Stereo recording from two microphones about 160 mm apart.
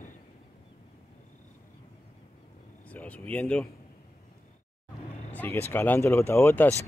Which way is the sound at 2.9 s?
10° left (ahead or behind).